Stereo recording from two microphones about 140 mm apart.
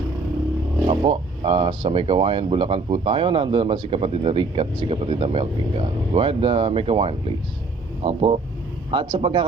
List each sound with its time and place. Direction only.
0.9 s speech: 40° right (ahead or behind)